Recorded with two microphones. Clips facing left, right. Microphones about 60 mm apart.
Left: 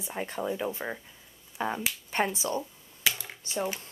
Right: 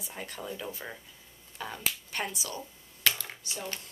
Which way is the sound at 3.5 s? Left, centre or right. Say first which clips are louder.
Left 9 dB; left.